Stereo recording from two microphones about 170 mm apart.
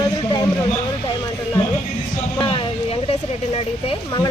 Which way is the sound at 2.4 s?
30° left (ahead or behind).